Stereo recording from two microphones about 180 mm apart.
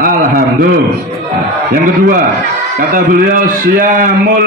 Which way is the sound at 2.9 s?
50° right (ahead or behind).